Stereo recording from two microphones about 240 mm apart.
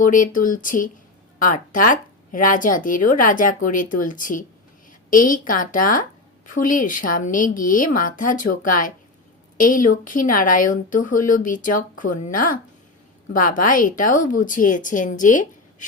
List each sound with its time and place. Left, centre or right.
0.0 s a woman's voice: left